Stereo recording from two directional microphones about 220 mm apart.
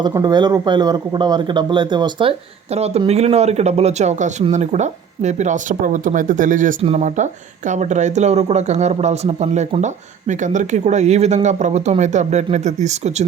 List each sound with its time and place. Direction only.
0.0 s speech: 15° right (ahead or behind)